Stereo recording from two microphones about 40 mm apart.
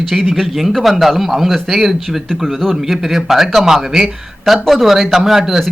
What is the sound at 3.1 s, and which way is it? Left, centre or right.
A man's voice, centre.